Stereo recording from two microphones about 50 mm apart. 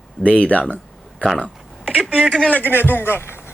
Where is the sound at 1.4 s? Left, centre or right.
Left.